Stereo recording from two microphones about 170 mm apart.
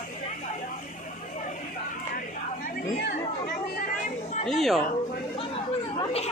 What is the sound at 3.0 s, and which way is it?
Chatter, 65° left (ahead or behind).